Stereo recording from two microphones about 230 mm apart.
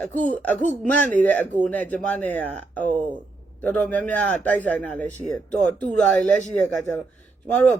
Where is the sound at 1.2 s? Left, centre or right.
Centre.